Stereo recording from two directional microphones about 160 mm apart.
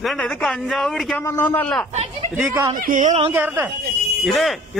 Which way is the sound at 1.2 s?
15° left (ahead or behind).